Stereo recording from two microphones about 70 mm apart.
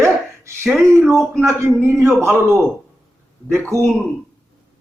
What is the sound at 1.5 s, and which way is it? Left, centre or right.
A man's voice, right.